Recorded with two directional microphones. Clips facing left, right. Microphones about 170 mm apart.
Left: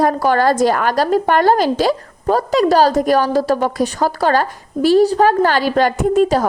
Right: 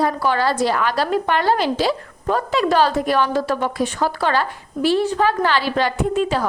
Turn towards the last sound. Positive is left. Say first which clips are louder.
# left 6 dB
turn(degrees=40)  # may be behind; listen again after turning